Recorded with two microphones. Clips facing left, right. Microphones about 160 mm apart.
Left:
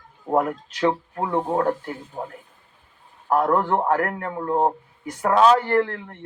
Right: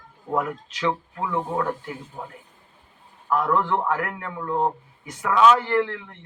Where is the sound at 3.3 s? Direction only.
45° left (ahead or behind).